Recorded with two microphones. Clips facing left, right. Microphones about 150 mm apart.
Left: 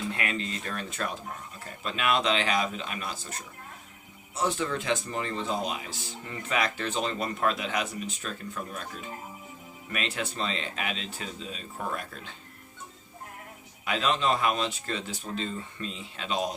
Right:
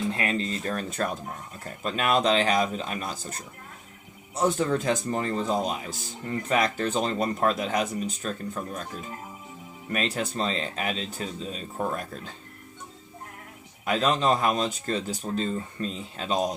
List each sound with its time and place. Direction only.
0.1 s speech: 35° right (ahead or behind)
13.8 s speech: 40° right (ahead or behind)